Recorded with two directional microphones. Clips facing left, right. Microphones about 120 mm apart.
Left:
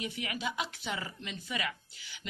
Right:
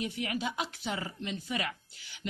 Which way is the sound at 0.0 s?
40° right (ahead or behind).